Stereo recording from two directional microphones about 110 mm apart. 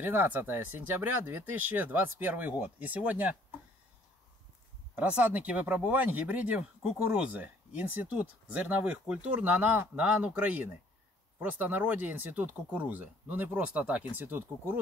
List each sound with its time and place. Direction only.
0.0 s speech: 15° right (ahead or behind)
4.9 s speech: 15° right (ahead or behind)